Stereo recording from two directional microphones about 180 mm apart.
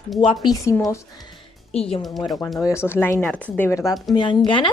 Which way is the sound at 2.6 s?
15° left (ahead or behind).